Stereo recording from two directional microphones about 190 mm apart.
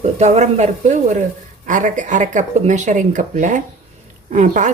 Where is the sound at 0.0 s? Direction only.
35° right (ahead or behind).